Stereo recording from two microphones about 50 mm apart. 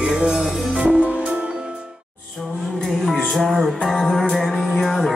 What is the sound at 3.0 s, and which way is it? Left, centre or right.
Music, centre.